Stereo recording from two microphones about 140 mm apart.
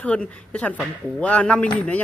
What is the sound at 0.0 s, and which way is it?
Speech, 10° left (ahead or behind).